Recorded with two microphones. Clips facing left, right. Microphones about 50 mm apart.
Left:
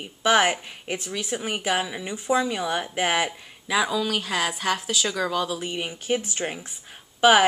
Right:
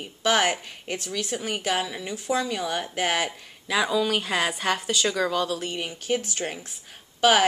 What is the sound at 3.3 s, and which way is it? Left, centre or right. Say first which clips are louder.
Speech: left 1 dB; centre.